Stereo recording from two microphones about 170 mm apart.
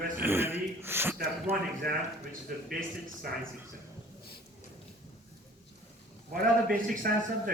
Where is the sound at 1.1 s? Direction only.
60° right (ahead or behind).